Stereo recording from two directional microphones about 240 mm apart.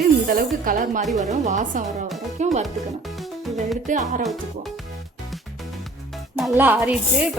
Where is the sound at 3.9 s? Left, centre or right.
Right.